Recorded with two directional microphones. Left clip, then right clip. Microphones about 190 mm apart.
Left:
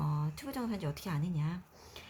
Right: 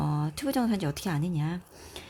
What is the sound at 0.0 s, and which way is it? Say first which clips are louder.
Speech: right 9 dB; 40° right (ahead or behind).